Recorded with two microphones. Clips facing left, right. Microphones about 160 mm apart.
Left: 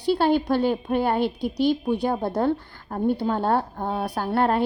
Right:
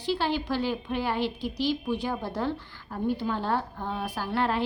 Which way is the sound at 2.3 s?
50° left (ahead or behind).